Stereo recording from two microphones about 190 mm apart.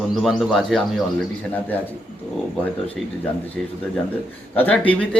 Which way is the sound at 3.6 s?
Centre (ahead or behind).